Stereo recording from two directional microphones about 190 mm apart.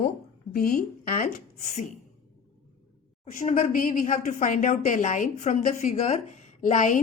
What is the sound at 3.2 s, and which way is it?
A woman's voice, 40° left (ahead or behind).